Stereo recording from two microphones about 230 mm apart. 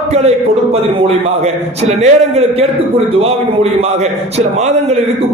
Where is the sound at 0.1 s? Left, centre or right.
Right.